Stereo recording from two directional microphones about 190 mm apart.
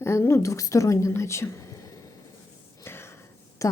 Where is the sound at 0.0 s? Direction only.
15° left (ahead or behind).